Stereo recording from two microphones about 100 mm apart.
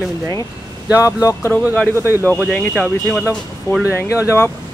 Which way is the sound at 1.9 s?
25° right (ahead or behind).